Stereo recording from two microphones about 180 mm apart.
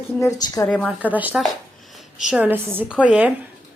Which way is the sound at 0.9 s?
10° right (ahead or behind).